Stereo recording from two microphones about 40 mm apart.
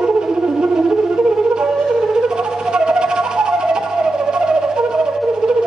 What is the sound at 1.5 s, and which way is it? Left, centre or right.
Music, centre.